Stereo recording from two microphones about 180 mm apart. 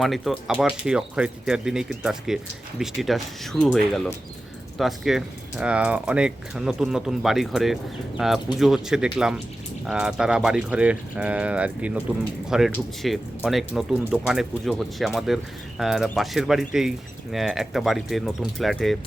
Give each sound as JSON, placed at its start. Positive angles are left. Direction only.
{"t": 0.0, "sound": "speech", "side_deg": 0}